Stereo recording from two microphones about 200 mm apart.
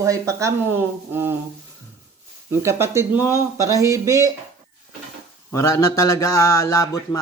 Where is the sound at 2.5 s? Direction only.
15° right (ahead or behind).